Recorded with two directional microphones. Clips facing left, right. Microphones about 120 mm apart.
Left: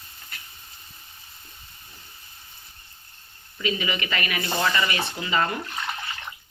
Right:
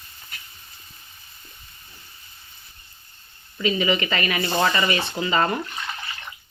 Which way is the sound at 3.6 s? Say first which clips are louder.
Right 6 dB; 30° right (ahead or behind).